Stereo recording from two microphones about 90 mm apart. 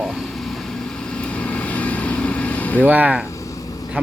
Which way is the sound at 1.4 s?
15° left (ahead or behind).